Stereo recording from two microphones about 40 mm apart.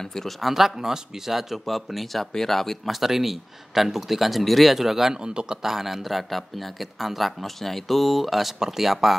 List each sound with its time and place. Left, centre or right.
0.0 s speech: centre
0.4 s speech: centre
3.0 s speech: centre
5.2 s a man's voice: right
5.6 s speech: centre